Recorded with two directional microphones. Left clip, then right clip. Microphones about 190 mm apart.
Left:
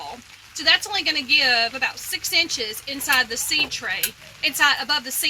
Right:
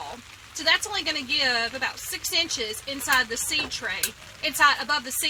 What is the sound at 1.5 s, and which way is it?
Speech, 5° right (ahead or behind).